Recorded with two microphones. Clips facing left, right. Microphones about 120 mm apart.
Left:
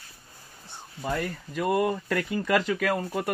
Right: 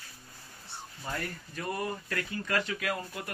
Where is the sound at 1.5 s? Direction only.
90° left.